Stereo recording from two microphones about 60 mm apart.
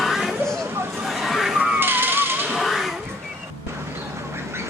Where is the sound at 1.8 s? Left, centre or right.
Right.